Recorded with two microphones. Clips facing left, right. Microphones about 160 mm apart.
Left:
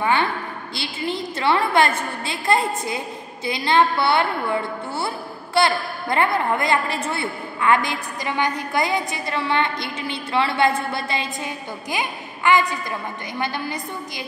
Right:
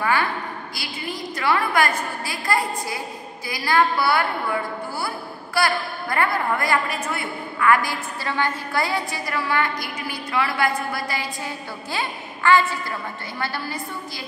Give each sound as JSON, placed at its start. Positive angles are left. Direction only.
{"t": 0.0, "sound": "a woman's voice", "side_deg": 25}